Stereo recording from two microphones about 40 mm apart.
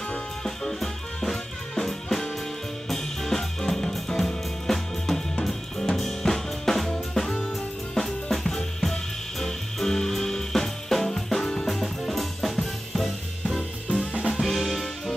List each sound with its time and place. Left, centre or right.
0.7 s music: centre
5.4 s drum kit: centre
7.9 s music: centre
13.8 s drum kit: left
14.4 s music: centre